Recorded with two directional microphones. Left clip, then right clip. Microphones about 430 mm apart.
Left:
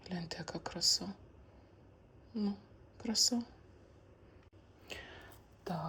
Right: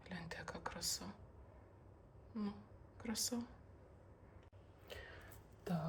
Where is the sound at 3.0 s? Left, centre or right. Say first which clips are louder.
Left 10 dB; centre.